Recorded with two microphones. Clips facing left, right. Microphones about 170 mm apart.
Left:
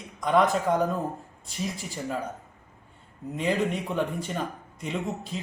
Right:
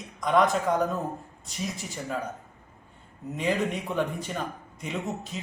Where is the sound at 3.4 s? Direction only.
Centre (ahead or behind).